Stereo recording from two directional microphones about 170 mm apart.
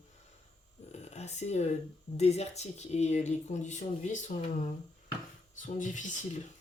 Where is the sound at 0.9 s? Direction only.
40° left (ahead or behind).